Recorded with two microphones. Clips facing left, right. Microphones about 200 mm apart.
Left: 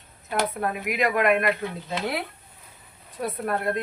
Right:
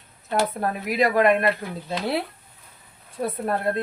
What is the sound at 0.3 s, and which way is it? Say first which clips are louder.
Speech: right 2 dB; 35° right (ahead or behind).